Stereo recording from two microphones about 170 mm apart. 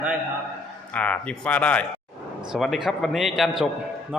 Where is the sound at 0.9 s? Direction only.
10° left (ahead or behind).